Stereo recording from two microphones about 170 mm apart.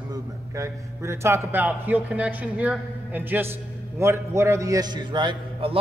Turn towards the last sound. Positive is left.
turn(degrees=-30)  # may be behind; listen again after turning